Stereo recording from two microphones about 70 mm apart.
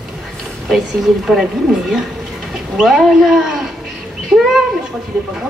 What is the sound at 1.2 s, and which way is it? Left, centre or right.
Speech, centre.